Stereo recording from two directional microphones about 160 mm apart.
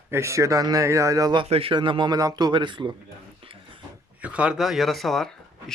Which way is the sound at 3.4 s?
35° right (ahead or behind).